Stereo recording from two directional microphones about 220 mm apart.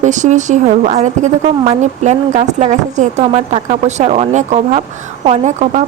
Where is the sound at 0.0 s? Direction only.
35° right (ahead or behind).